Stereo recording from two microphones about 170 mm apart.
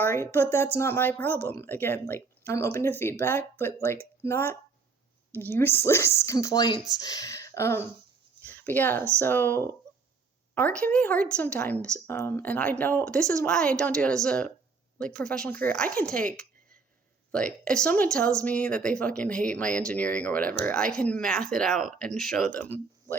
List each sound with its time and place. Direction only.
0.0 s speech: 15° left (ahead or behind)